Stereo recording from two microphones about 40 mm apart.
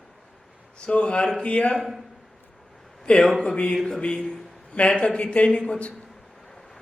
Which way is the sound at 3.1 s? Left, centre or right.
Left.